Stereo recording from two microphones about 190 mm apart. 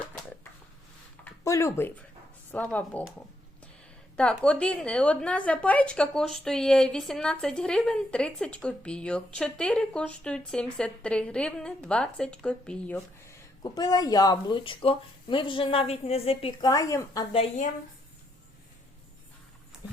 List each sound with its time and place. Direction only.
1.2 s speech: 15° left (ahead or behind)
4.2 s a woman's voice: 5° left (ahead or behind)
13.6 s speech: 20° left (ahead or behind)